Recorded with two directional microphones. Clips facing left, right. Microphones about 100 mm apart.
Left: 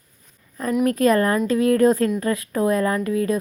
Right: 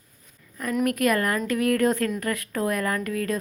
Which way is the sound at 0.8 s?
25° left (ahead or behind).